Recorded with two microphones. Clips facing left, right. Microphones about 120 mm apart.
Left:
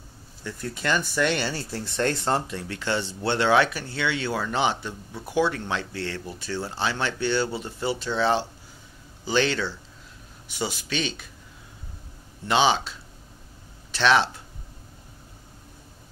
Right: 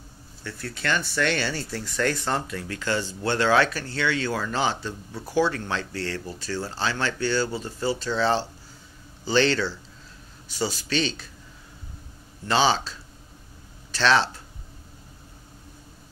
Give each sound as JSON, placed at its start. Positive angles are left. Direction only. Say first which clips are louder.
{"t": 0.4, "sound": "speech", "louder": "left 2 dB", "side_deg": 20}
{"t": 1.5, "sound": "speech", "louder": "even", "side_deg": 30}
{"t": 12.4, "sound": "speech", "louder": "even", "side_deg": 15}
{"t": 13.9, "sound": "speech", "louder": "left 1 dB", "side_deg": 15}